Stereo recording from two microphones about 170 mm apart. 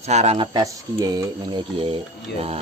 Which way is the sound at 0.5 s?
20° right (ahead or behind).